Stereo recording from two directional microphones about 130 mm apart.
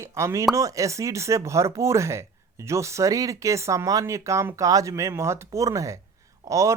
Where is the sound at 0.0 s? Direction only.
20° right (ahead or behind).